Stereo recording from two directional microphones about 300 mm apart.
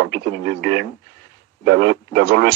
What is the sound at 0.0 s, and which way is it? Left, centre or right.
Speech, right.